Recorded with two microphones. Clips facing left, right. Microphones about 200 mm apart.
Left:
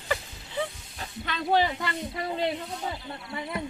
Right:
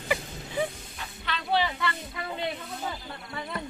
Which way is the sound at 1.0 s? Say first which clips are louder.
Left 3 dB; 45° left (ahead or behind).